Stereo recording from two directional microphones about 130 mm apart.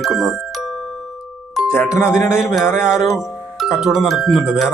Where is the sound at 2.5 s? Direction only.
5° right (ahead or behind).